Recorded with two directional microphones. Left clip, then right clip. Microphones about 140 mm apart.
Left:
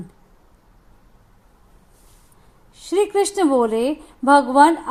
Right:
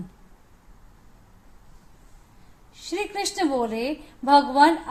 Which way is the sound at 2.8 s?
35° left (ahead or behind).